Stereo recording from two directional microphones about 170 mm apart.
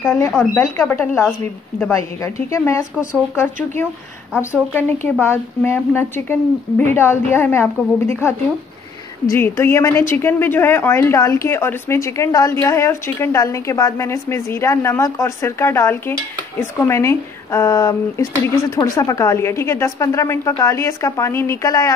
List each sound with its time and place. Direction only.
0.4 s speech: 15° left (ahead or behind)